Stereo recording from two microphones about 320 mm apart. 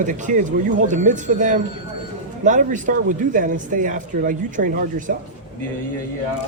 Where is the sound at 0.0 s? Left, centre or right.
Right.